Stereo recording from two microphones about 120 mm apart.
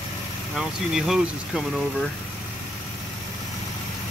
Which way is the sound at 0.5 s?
5° right (ahead or behind).